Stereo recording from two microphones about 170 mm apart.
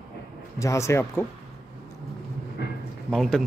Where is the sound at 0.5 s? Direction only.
15° left (ahead or behind).